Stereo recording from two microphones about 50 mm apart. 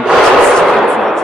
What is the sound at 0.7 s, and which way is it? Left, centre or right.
Speech, centre.